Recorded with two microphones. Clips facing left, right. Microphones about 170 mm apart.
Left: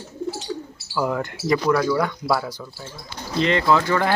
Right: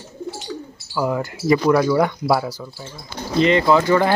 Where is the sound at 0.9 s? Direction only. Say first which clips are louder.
Right 2 dB; 5° right (ahead or behind).